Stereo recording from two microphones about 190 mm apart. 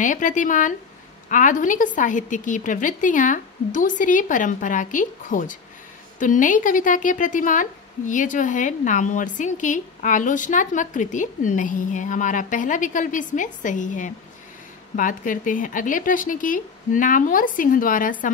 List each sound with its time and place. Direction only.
0.0 s a woman's voice: 40° left (ahead or behind)